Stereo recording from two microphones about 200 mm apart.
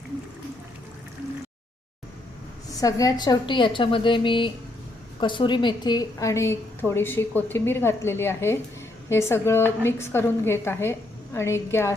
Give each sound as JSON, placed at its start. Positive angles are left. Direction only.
{"t": 2.8, "sound": "a woman's voice", "side_deg": 15}